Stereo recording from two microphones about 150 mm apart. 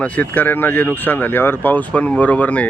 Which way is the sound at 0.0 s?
10° left (ahead or behind).